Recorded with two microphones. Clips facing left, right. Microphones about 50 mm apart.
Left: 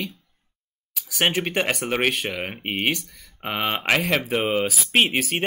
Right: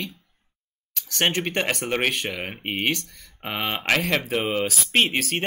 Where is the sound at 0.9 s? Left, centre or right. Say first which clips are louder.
Left 1 dB; centre.